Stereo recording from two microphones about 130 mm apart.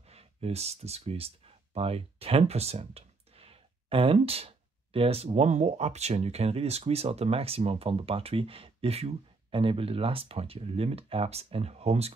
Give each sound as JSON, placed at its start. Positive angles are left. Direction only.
{"t": 0.0, "sound": "speech", "side_deg": -50}